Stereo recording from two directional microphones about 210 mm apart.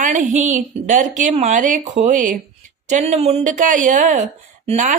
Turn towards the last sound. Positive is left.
turn(degrees=-35)  # may be behind; listen again after turning